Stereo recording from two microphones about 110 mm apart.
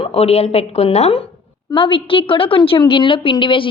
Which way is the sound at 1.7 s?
50° left (ahead or behind).